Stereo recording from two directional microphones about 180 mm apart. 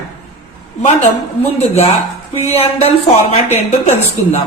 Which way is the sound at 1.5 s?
35° left (ahead or behind).